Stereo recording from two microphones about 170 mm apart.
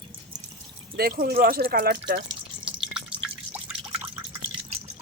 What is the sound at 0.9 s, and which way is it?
Speech, 65° right (ahead or behind).